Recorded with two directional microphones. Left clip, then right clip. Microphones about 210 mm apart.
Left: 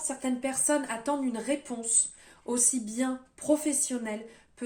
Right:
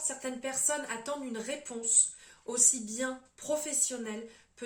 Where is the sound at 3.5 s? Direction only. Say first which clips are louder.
Left 5 dB; 45° left (ahead or behind).